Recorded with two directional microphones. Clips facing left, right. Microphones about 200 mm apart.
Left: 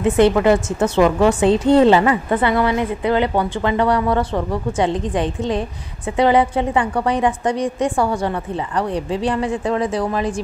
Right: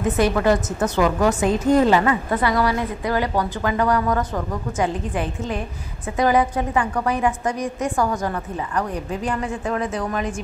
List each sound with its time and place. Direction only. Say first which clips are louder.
0.0 s a woman's voice: left 5 dB; 25° left (ahead or behind)